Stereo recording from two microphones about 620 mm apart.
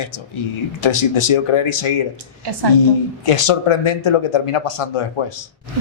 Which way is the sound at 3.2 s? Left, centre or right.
Left.